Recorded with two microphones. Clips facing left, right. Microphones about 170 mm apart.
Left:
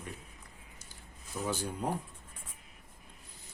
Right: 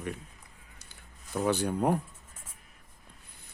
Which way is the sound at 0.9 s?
65° right (ahead or behind).